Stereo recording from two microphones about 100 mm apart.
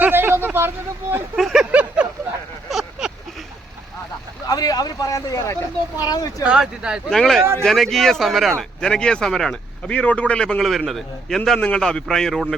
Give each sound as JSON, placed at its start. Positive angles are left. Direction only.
{"t": 0.0, "sound": "speech", "side_deg": -20}
{"t": 1.4, "sound": "speech", "side_deg": 0}
{"t": 1.7, "sound": "speech", "side_deg": -15}
{"t": 2.6, "sound": "a sound", "side_deg": 0}
{"t": 4.4, "sound": "speech", "side_deg": 40}
{"t": 6.4, "sound": "speech", "side_deg": -10}
{"t": 7.1, "sound": "speech", "side_deg": 5}